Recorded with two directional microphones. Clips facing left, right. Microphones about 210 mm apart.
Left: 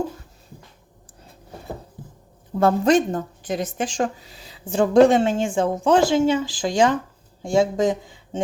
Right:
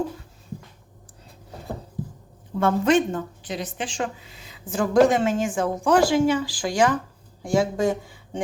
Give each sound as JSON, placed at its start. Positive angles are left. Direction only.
{"t": 2.6, "sound": "a woman's voice", "side_deg": 35}